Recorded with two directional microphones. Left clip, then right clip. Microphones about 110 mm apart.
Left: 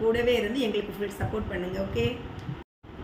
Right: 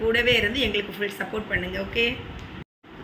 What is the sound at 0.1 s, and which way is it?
A man's voice, 30° left (ahead or behind).